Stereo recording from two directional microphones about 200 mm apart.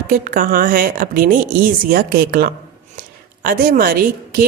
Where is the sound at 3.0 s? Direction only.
45° right (ahead or behind).